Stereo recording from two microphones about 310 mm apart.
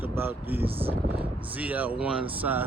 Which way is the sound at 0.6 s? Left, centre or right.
Centre.